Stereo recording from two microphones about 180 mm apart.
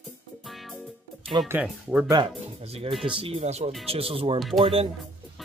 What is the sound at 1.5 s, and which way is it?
Speech, 5° right (ahead or behind).